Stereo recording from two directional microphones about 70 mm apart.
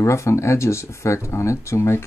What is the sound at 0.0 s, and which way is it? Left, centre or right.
Speech, left.